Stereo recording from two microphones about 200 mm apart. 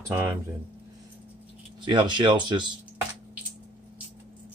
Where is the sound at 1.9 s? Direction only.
25° right (ahead or behind).